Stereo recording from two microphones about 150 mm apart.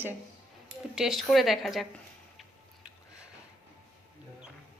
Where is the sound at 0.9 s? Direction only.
Centre (ahead or behind).